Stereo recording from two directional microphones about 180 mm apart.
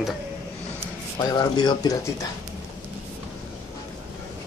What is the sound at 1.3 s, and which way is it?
Speech, 25° left (ahead or behind).